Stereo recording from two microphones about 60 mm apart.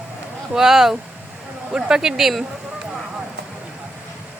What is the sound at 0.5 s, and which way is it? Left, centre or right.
Speech, centre.